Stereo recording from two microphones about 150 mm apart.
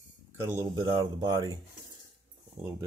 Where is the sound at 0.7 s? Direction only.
30° right (ahead or behind).